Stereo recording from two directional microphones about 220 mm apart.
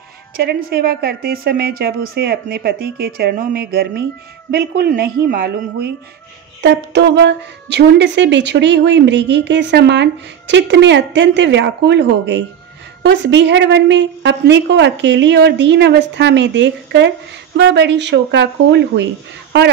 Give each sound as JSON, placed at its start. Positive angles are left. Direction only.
{"t": 0.4, "sound": "speech", "side_deg": -45}